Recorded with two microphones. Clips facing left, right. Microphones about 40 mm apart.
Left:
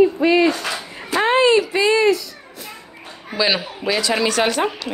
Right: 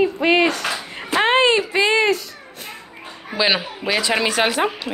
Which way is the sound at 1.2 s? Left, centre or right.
Right.